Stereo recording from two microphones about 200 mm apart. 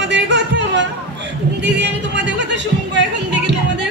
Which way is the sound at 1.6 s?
60° right (ahead or behind).